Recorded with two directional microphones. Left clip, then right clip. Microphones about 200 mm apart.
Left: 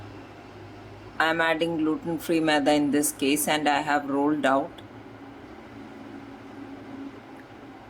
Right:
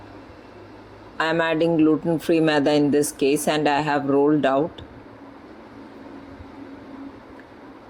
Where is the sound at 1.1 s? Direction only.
30° right (ahead or behind).